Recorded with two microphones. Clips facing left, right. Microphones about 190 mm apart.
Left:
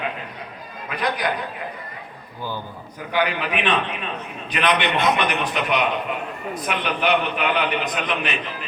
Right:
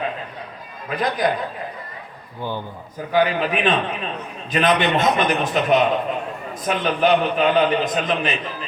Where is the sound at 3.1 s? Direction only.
40° right (ahead or behind).